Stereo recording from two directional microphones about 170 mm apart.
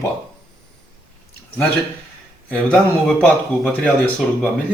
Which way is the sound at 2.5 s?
5° left (ahead or behind).